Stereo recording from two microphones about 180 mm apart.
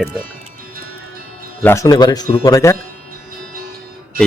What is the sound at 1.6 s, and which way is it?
Speech, 15° left (ahead or behind).